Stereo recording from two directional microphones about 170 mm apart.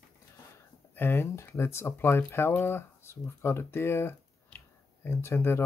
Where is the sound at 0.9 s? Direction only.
10° left (ahead or behind).